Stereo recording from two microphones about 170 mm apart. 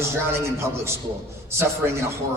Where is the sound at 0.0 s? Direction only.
15° right (ahead or behind).